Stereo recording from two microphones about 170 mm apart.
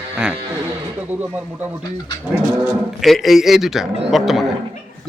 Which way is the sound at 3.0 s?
Centre (ahead or behind).